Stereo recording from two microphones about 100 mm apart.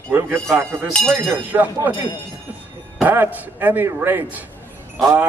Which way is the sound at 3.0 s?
20° right (ahead or behind).